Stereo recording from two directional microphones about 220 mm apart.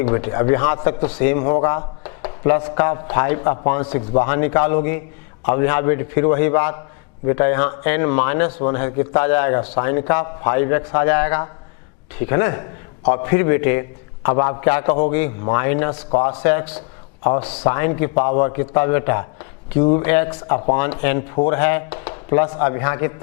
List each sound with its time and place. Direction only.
0.0 s a man's voice: 15° left (ahead or behind)